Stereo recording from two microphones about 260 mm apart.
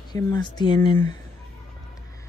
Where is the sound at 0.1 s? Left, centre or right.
Centre.